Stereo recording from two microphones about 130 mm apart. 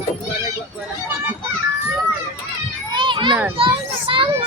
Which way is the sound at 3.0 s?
40° right (ahead or behind).